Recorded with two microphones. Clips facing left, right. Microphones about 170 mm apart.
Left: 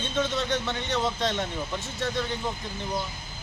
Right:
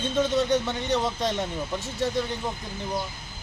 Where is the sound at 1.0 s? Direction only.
10° right (ahead or behind).